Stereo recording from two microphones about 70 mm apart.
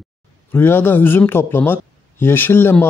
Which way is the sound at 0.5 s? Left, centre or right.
Left.